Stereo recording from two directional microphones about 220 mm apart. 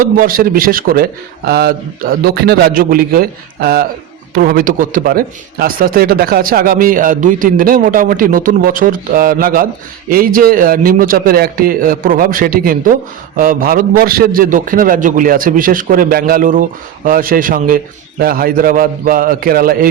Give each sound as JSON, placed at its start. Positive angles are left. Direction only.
{"t": 0.0, "sound": "a man's voice", "side_deg": -40}